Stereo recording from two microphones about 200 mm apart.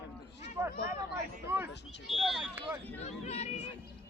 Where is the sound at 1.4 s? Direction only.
10° right (ahead or behind).